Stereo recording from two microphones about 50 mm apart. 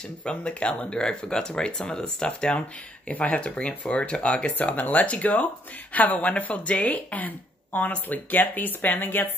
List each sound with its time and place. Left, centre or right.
0.2 s speech: left
3.1 s speech: left
4.6 s a woman's voice: left